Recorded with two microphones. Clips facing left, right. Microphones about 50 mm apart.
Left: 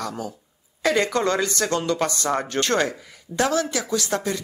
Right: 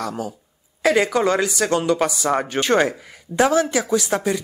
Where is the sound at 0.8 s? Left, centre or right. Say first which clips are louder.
Right 3 dB; centre.